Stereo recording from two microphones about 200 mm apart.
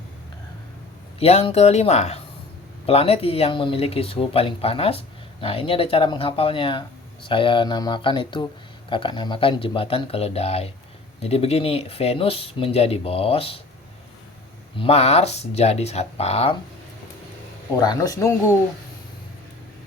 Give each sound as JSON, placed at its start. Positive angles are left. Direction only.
{"t": 1.2, "sound": "speech", "side_deg": 30}
{"t": 14.8, "sound": "speech", "side_deg": 30}
{"t": 17.7, "sound": "speech", "side_deg": 20}